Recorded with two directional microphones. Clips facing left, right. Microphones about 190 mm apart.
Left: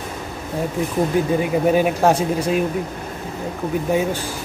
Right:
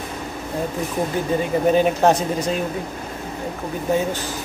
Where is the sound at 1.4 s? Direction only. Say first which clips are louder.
Right 3 dB; 10° left (ahead or behind).